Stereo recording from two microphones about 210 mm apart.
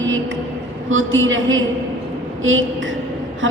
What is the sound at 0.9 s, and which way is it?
Speech, 70° right (ahead or behind).